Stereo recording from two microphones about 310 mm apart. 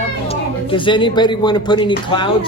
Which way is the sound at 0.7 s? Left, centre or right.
Centre.